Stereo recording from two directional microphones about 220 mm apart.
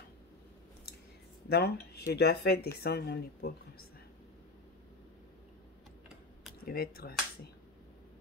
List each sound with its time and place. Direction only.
1.5 s speech: 45° left (ahead or behind)
6.6 s speech: 45° left (ahead or behind)